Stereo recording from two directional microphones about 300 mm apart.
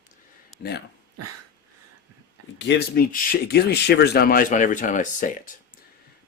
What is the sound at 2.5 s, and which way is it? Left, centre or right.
Speech, left.